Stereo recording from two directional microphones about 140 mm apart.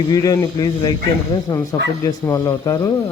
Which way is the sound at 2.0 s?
25° left (ahead or behind).